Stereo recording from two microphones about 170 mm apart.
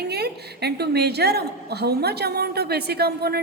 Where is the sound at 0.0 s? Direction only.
70° right (ahead or behind).